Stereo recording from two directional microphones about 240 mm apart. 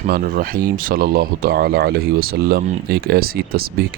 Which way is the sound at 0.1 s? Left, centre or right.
Right.